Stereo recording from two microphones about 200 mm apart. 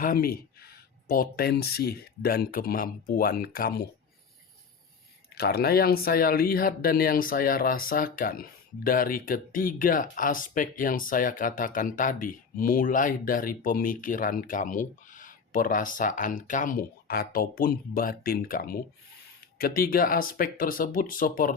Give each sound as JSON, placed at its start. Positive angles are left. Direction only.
{"t": 0.0, "sound": "speech", "side_deg": 45}
{"t": 5.3, "sound": "speech", "side_deg": 50}